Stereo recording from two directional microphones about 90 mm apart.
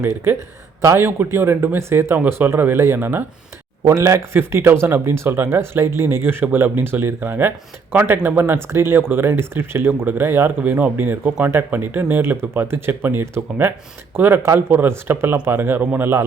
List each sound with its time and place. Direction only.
0.9 s speech: 25° right (ahead or behind)
3.8 s speech: 35° right (ahead or behind)